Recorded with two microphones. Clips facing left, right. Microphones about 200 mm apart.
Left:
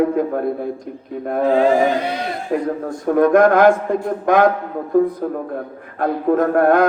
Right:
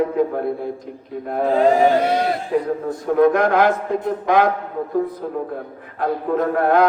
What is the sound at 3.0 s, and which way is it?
A man's voice, 50° left (ahead or behind).